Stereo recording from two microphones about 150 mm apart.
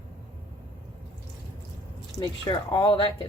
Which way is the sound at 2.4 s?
30° left (ahead or behind).